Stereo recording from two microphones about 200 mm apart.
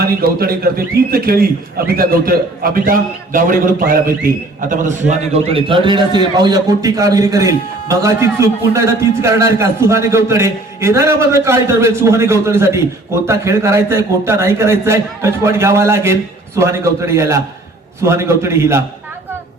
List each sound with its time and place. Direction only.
0.0 s a man's voice: 50° right (ahead or behind); by 18.8 s 15° right (ahead or behind)